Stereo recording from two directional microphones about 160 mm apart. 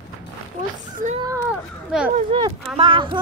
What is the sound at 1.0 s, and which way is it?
Speech, 55° right (ahead or behind).